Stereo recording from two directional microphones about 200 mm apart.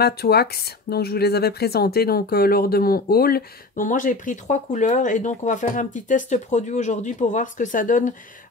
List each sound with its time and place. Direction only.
0.0 s speech: 50° left (ahead or behind)